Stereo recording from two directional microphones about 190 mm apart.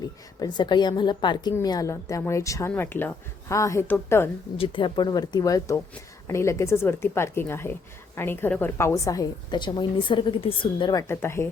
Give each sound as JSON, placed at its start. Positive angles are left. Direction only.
{"t": 0.3, "sound": "a woman's voice", "side_deg": 25}
{"t": 4.5, "sound": "a woman's voice", "side_deg": 30}
{"t": 11.1, "sound": "a woman's voice", "side_deg": 15}